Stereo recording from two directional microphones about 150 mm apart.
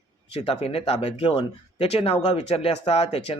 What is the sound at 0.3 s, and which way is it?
Speech, 40° left (ahead or behind).